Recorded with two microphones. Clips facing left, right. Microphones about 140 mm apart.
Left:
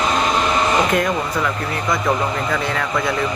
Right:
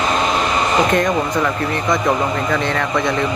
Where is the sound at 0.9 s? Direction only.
5° left (ahead or behind).